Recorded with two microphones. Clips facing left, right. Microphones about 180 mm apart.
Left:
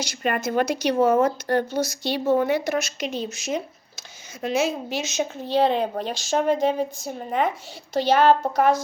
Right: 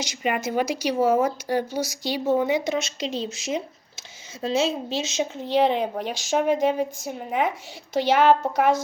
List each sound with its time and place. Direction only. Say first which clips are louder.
0.0 s a woman's voice: left 1 dB; 15° right (ahead or behind)